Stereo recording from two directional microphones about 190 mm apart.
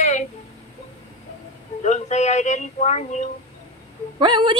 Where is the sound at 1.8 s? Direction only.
40° left (ahead or behind).